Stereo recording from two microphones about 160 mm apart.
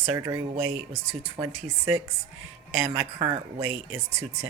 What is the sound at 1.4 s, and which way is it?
Speech, 15° right (ahead or behind).